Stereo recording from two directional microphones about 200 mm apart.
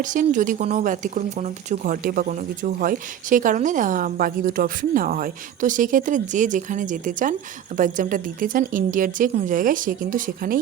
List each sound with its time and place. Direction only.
0.0 s speech: 40° right (ahead or behind)